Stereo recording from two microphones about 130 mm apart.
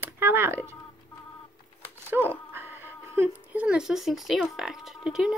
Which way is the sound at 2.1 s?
10° right (ahead or behind).